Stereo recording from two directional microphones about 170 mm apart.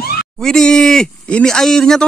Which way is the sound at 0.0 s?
65° left (ahead or behind).